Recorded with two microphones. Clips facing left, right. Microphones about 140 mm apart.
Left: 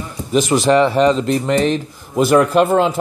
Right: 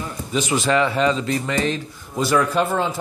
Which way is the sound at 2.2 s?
50° left (ahead or behind).